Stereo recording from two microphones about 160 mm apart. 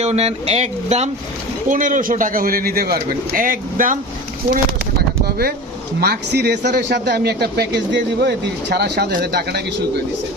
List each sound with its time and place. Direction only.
0.0 s speech: 40° right (ahead or behind)
1.6 s a man's voice: 55° right (ahead or behind)
4.5 s bird: 75° right (ahead or behind)
6.0 s a man's voice: 85° right